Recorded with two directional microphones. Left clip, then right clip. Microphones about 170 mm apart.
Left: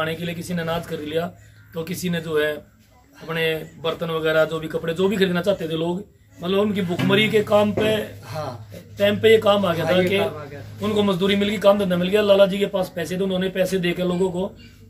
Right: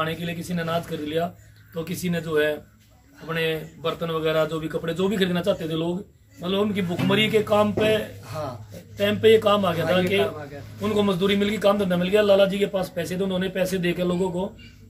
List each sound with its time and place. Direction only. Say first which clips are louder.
0.0 s a man's voice: left 2 dB; 10° left (ahead or behind)
8.3 s a man's voice: left 1 dB; 30° left (ahead or behind)
8.9 s a man's voice: left 2 dB; centre (ahead or behind)